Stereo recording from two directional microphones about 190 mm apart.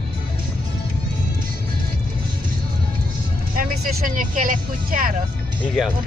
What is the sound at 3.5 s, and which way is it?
Vehicle, 45° right (ahead or behind).